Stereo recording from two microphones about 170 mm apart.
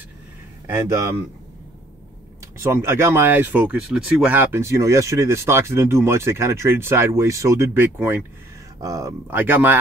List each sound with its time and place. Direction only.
0.7 s speech: 15° right (ahead or behind)
2.6 s speech: 15° right (ahead or behind)